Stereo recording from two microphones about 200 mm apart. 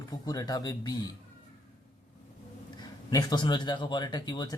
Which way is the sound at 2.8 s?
20° left (ahead or behind).